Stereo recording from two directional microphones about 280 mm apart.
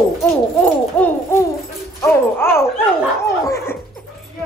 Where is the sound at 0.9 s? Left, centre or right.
Centre.